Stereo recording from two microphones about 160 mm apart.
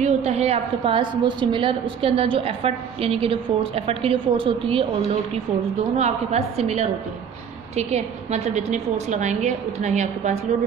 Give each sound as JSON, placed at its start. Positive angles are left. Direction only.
{"t": 0.0, "sound": "a woman's voice", "side_deg": -40}
{"t": 5.9, "sound": "a woman's voice", "side_deg": -45}